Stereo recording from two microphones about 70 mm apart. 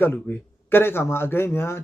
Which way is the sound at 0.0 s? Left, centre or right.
Left.